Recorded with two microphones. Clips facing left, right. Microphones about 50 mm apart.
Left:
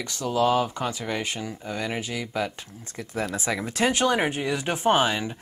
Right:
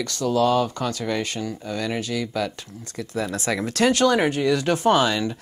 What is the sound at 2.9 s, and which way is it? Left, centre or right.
Speech, left.